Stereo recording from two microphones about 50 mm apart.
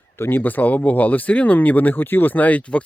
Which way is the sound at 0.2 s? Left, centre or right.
Left.